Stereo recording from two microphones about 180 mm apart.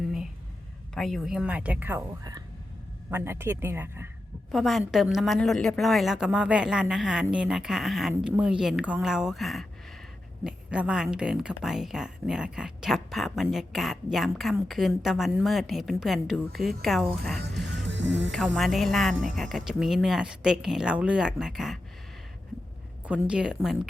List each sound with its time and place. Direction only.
0.9 s a woman's voice: centre (ahead or behind)
4.5 s a woman's voice: centre (ahead or behind)
17.7 s music: 80° right
18.3 s a woman's voice: centre (ahead or behind)
23.0 s a woman's voice: 5° right (ahead or behind)